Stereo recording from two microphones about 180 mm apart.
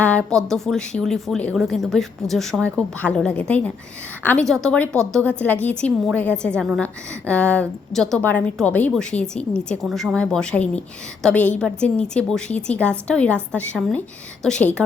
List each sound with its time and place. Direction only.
0.0 s a woman's voice: 5° left (ahead or behind)